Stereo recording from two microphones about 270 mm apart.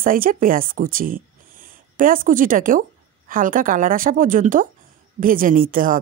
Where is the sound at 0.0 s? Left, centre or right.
Right.